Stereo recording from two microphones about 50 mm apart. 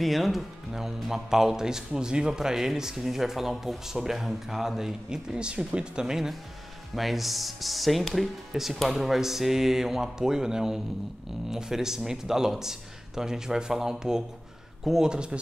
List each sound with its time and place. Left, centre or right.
0.0 s speech: centre